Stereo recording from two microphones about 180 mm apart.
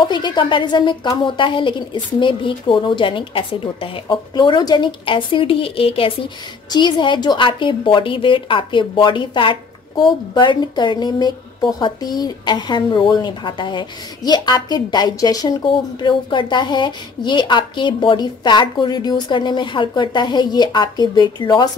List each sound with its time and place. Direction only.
0.0 s a woman's voice: 25° left (ahead or behind)